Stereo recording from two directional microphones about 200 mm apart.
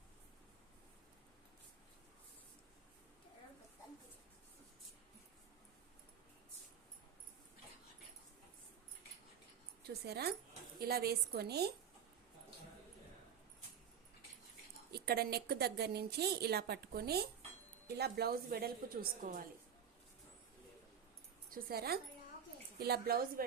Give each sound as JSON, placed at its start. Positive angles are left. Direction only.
{"t": 9.8, "sound": "a woman's voice", "side_deg": -55}
{"t": 14.8, "sound": "a woman's voice", "side_deg": -50}
{"t": 21.5, "sound": "a woman's voice", "side_deg": -50}